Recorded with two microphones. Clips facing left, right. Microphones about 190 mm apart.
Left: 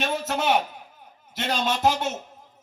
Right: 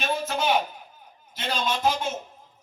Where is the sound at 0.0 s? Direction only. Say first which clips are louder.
Left 1 dB; 70° left (ahead or behind).